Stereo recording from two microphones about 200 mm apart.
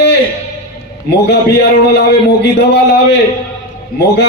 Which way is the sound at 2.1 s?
55° left (ahead or behind).